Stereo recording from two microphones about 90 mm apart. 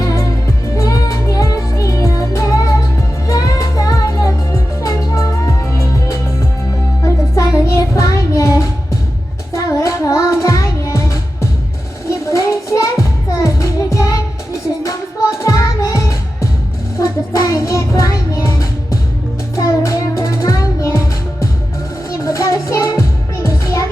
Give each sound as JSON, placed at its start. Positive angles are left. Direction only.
{"t": 0.0, "sound": "music", "side_deg": 35}
{"t": 9.5, "sound": "child singing", "side_deg": 35}
{"t": 12.0, "sound": "music", "side_deg": 35}
{"t": 17.0, "sound": "child singing", "side_deg": 40}
{"t": 19.5, "sound": "music", "side_deg": 35}
{"t": 22.2, "sound": "music", "side_deg": 35}